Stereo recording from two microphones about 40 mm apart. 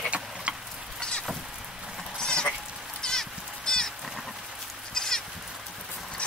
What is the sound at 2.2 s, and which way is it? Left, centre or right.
Sheep, left.